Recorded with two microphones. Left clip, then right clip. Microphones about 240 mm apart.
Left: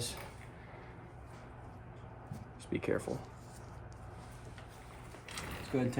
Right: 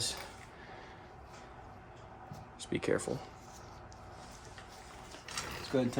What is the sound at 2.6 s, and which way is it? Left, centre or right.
Speech, right.